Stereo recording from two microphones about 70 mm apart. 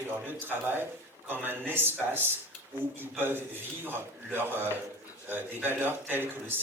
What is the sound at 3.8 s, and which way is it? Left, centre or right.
Speech, right.